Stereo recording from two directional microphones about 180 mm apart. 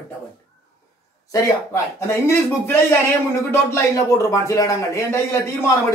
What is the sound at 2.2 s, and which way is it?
Speech, 15° left (ahead or behind).